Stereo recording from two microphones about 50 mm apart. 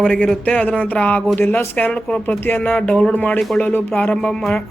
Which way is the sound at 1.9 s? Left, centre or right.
Centre.